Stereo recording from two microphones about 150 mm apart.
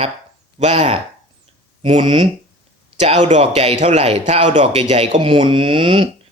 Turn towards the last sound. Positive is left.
turn(degrees=-35)  # may be behind; listen again after turning